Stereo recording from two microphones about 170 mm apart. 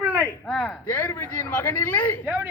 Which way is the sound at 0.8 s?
15° left (ahead or behind).